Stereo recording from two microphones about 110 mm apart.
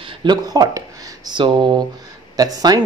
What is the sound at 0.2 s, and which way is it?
Speech, 40° right (ahead or behind).